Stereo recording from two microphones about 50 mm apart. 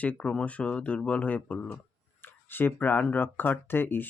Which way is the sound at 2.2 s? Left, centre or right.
Left.